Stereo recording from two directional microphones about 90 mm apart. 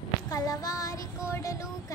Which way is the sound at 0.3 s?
45° left (ahead or behind).